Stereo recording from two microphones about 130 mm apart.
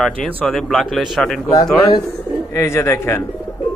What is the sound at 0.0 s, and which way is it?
Speech, 5° left (ahead or behind).